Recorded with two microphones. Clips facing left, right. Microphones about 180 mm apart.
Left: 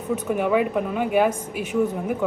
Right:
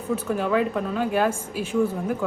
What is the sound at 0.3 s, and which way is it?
Speech, 15° left (ahead or behind).